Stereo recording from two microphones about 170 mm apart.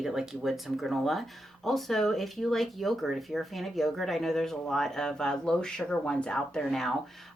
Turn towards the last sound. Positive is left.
turn(degrees=0)  # may be behind; listen again after turning